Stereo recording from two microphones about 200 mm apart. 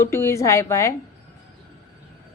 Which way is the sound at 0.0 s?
15° left (ahead or behind).